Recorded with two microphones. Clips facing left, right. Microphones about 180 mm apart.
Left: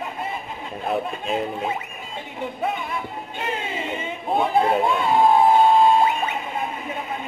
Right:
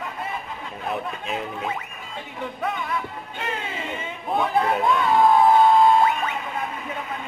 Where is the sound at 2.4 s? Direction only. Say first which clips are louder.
Left 2 dB; 25° left (ahead or behind).